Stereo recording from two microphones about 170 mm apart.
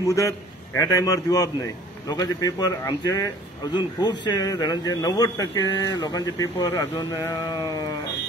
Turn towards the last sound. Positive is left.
turn(degrees=20)  # may be behind; listen again after turning